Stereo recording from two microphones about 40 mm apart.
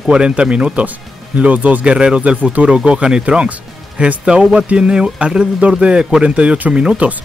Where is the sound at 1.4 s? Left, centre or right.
Right.